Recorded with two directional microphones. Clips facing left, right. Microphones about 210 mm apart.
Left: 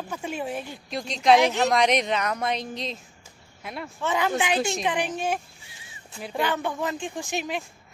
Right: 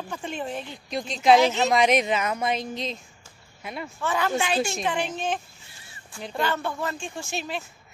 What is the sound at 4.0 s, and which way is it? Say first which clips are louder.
A woman's voice: left 1 dB; 20° left (ahead or behind).